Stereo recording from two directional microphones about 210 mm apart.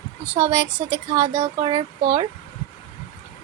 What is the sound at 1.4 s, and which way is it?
Speech, 20° right (ahead or behind).